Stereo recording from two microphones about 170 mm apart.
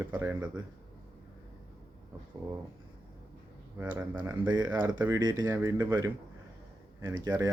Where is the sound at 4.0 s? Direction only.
10° right (ahead or behind).